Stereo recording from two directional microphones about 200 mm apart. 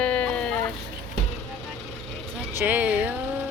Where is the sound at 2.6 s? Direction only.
10° right (ahead or behind).